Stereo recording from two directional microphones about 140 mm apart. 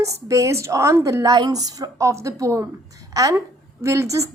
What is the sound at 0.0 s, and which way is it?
A woman's voice, 20° right (ahead or behind).